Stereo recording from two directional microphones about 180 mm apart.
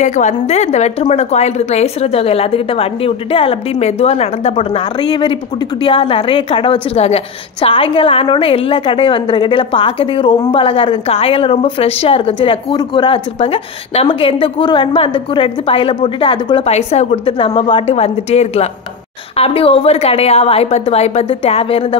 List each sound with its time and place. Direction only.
0.0 s a woman's voice: 40° left (ahead or behind)